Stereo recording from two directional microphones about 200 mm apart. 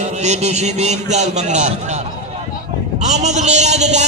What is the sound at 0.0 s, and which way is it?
A man's voice, 35° right (ahead or behind).